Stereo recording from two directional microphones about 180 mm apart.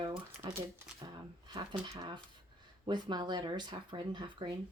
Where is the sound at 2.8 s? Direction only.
25° right (ahead or behind).